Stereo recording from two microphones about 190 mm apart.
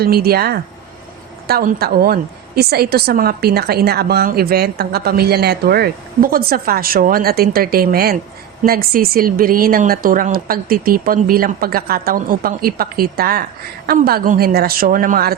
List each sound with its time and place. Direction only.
0.0 s a woman's voice: 55° right (ahead or behind)